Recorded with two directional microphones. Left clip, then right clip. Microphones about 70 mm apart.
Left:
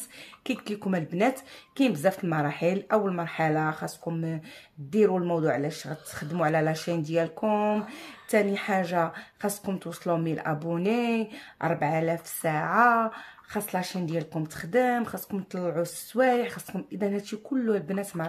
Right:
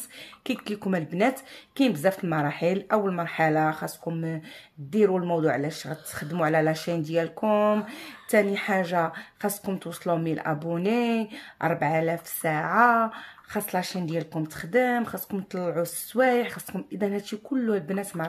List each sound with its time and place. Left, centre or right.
0.5 s a woman's voice: right
3.2 s a woman's voice: right
7.5 s a woman's voice: right
15.5 s speech: right